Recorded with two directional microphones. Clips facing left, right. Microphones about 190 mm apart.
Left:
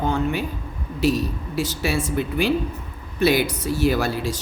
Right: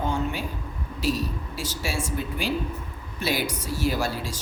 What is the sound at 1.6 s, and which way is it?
A woman's voice, 60° left (ahead or behind).